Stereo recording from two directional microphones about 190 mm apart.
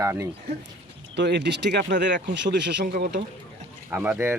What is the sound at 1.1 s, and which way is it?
Speech, 65° right (ahead or behind).